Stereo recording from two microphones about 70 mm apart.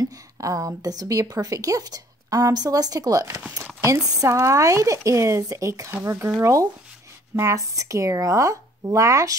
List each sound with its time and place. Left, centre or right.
0.0 s a woman's voice: right